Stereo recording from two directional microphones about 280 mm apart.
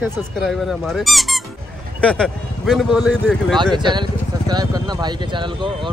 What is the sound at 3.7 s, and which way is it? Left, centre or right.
Speech, centre.